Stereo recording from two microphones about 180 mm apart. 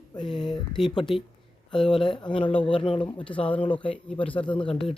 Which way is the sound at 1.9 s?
30° left (ahead or behind).